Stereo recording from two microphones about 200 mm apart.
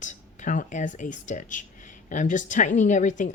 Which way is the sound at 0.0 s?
40° left (ahead or behind).